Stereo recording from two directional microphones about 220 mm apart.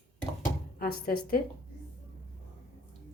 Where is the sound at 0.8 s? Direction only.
45° left (ahead or behind).